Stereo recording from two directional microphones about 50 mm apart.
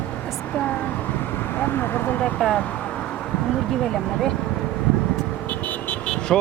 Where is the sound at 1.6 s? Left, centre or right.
Left.